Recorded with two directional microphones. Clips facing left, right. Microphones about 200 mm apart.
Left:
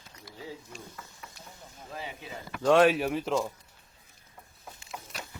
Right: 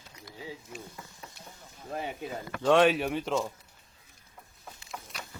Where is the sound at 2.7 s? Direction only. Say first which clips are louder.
Left 1 dB; 5° left (ahead or behind).